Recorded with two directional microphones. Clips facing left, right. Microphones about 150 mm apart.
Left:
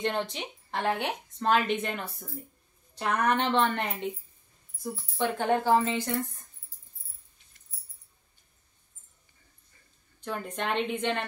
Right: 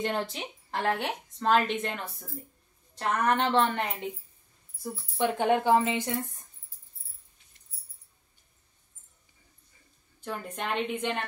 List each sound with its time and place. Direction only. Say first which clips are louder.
0.0 s a woman's voice: even; 5° right (ahead or behind)
5.1 s speech: right 2 dB; 15° right (ahead or behind)
10.2 s a woman's voice: left 2 dB; 5° right (ahead or behind)